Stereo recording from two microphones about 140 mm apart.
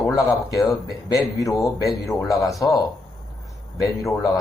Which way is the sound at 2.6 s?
25° left (ahead or behind).